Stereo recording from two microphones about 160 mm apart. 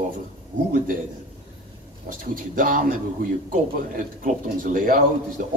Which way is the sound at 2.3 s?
60° right (ahead or behind).